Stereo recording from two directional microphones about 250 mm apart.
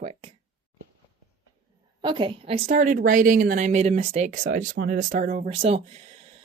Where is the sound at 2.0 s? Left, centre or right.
Centre.